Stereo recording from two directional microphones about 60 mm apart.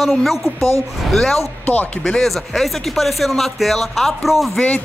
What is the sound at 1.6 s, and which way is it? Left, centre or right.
Speech, left.